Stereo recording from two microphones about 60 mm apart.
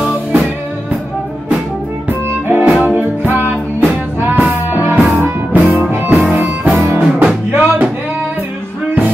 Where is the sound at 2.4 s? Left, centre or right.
Right.